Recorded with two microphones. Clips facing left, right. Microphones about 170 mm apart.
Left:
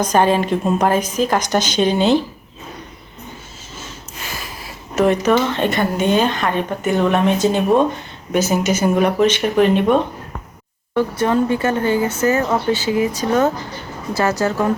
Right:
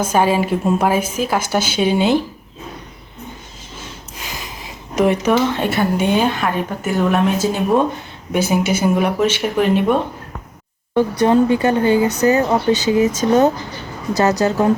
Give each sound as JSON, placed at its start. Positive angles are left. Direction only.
{"t": 0.0, "sound": "a woman's voice", "side_deg": -5}
{"t": 3.8, "sound": "speech", "side_deg": -15}
{"t": 8.3, "sound": "a woman's voice", "side_deg": -10}
{"t": 11.2, "sound": "a woman's voice", "side_deg": -15}